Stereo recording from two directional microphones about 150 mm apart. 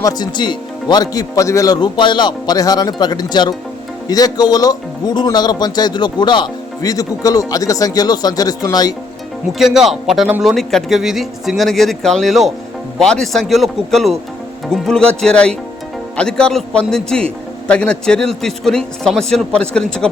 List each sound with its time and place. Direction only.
0.0 s speech: 30° left (ahead or behind)
9.5 s a man's voice: centre (ahead or behind)